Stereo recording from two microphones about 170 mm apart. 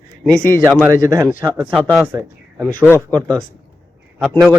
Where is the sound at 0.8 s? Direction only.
20° right (ahead or behind).